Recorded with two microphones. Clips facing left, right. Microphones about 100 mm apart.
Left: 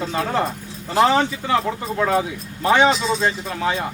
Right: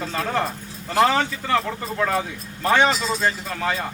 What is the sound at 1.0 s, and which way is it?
Speech, 15° left (ahead or behind).